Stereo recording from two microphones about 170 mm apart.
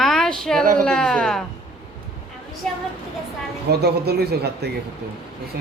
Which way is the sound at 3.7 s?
70° right (ahead or behind).